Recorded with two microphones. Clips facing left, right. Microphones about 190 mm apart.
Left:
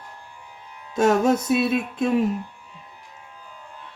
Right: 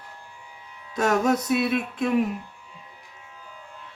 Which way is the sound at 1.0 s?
25° left (ahead or behind).